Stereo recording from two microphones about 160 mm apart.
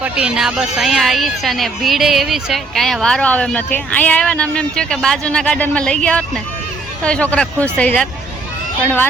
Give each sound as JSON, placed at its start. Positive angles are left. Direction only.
{"t": 0.0, "sound": "speech", "side_deg": -5}